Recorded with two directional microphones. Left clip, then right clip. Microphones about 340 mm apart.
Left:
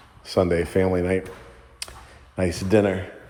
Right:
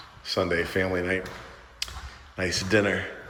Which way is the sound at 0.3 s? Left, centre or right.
Centre.